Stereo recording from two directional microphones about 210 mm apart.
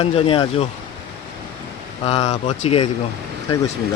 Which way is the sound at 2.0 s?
30° left (ahead or behind).